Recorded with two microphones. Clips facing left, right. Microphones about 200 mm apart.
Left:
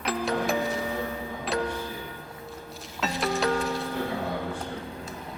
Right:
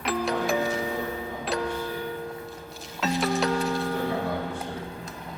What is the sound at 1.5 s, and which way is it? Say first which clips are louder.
Music: left 1 dB; centre (ahead or behind).